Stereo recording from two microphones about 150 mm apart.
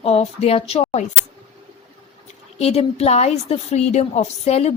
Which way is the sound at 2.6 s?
45° left (ahead or behind).